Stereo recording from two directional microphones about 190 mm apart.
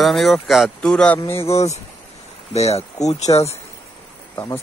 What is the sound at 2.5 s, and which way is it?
Speech, 35° left (ahead or behind).